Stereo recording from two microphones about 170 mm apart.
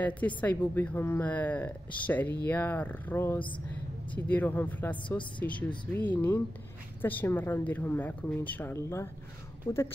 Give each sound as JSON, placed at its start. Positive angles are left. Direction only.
{"t": 0.0, "sound": "a woman's voice", "side_deg": 10}